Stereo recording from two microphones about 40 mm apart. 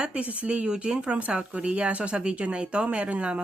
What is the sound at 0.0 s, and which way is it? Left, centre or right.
Speech, right.